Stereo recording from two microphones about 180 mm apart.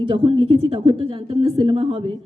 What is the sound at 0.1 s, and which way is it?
A woman's voice, 30° right (ahead or behind).